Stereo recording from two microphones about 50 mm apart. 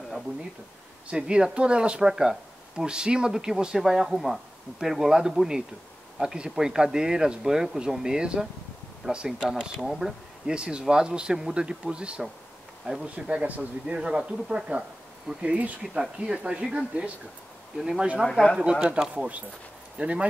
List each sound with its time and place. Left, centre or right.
1.0 s speech: centre
15.4 s speech: right
15.9 s speech: centre
17.7 s speech: centre
18.6 s speech: right